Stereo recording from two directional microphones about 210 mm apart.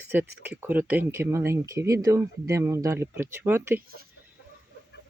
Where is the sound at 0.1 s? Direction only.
10° right (ahead or behind).